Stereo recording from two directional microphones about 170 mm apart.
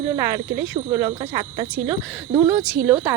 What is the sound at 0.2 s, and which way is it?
Speech, 15° right (ahead or behind).